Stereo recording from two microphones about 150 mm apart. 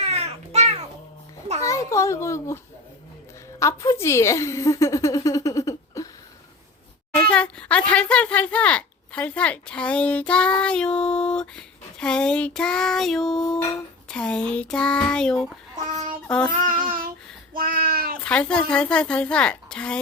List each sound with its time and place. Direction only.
0.0 s a sound: 45° right (ahead or behind)
1.6 s a child's voice: 20° left (ahead or behind)
3.6 s a woman's voice: 20° left (ahead or behind)
7.3 s speech: 10° left (ahead or behind)
15.9 s child singing: 50° right (ahead or behind)
16.2 s child singing: 5° left (ahead or behind)
16.5 s child singing: 70° right (ahead or behind)
18.3 s speech: 5° left (ahead or behind)